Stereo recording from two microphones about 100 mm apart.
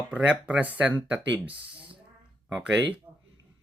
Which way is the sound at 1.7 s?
60° right (ahead or behind).